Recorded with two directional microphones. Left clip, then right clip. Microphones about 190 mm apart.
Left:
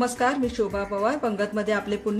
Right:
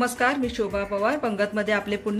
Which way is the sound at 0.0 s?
10° left (ahead or behind).